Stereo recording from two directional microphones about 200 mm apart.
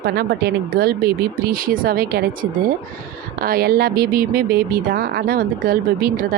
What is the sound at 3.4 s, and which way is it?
A woman's voice, 45° right (ahead or behind).